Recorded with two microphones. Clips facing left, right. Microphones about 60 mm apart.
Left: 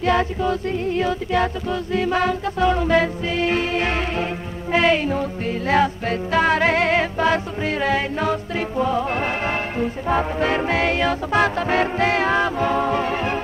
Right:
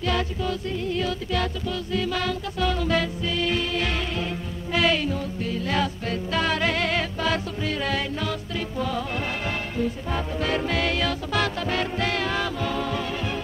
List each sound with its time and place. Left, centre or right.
0.0 s music: left